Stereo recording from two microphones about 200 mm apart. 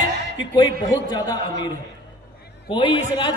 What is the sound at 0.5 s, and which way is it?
Speech, 20° left (ahead or behind).